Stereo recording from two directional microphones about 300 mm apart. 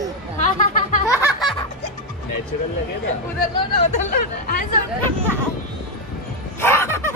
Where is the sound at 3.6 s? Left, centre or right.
Centre.